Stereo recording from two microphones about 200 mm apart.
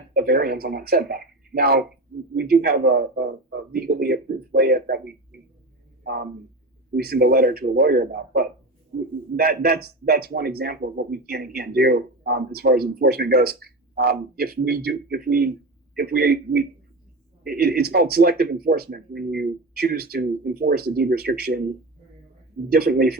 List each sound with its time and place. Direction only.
0.1 s speech: 50° right (ahead or behind)
6.0 s a sound: 50° right (ahead or behind)
6.9 s speech: 50° right (ahead or behind)
22.7 s speech: 50° right (ahead or behind)